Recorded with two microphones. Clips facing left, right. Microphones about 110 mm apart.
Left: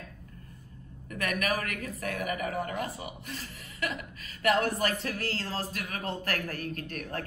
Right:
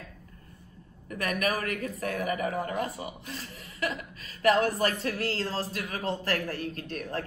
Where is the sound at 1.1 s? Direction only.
35° right (ahead or behind).